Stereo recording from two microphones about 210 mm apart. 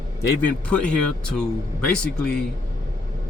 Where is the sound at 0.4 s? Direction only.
5° left (ahead or behind).